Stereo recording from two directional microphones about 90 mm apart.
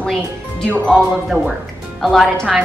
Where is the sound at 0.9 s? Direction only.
5° right (ahead or behind).